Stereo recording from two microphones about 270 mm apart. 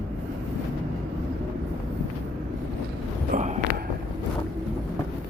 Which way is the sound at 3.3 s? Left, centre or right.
Right.